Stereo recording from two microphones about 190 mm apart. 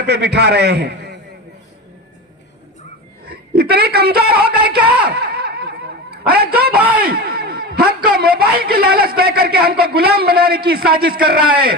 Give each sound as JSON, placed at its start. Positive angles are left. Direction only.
{"t": 0.0, "sound": "a man's voice", "side_deg": -60}
{"t": 3.2, "sound": "a woman's voice", "side_deg": -55}
{"t": 5.0, "sound": "a sound", "side_deg": -60}
{"t": 6.7, "sound": "a man's voice", "side_deg": -5}
{"t": 7.0, "sound": "a man's voice", "side_deg": -55}